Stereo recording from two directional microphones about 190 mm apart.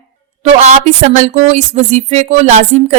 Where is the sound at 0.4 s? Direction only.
40° right (ahead or behind).